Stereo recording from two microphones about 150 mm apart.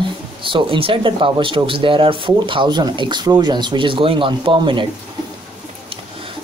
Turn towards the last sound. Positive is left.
turn(degrees=-35)  # may be behind; listen again after turning